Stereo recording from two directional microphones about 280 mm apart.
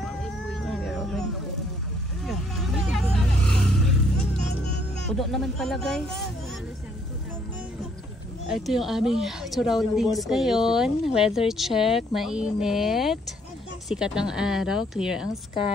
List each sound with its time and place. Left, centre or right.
0.0 s cat: centre
2.2 s vehicle: centre
5.1 s a woman's voice: centre
8.5 s a woman's voice: centre